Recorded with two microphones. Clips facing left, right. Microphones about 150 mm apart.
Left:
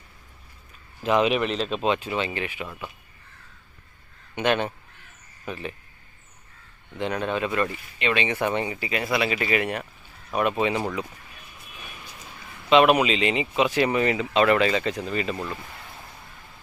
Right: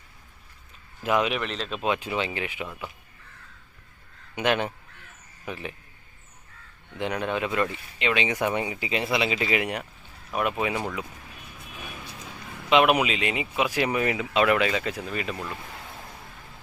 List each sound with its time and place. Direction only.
1.0 s speech: centre (ahead or behind)
1.4 s speech: 10° left (ahead or behind)
1.8 s speech: 10° right (ahead or behind)
4.4 s speech: 10° right (ahead or behind)
7.0 s speech: 15° right (ahead or behind)
10.3 s speech: 5° right (ahead or behind)
12.7 s speech: 10° right (ahead or behind)